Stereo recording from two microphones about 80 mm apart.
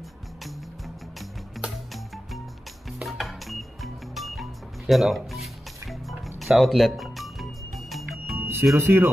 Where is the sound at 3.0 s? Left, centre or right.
Centre.